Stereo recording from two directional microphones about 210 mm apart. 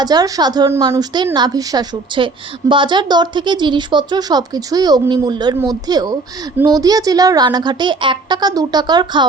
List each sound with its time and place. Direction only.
0.0 s a woman's voice: 20° right (ahead or behind)